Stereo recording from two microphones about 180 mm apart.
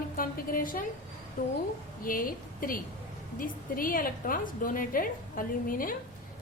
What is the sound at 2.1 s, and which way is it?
A woman's voice, 50° left (ahead or behind).